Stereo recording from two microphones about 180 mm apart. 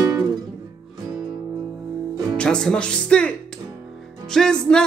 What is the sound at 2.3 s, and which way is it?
Speech, 5° left (ahead or behind).